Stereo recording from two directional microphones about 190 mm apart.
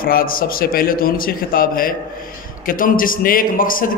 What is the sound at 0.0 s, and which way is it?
A man's voice, 50° left (ahead or behind).